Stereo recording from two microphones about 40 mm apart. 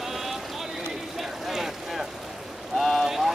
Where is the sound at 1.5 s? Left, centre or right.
Centre.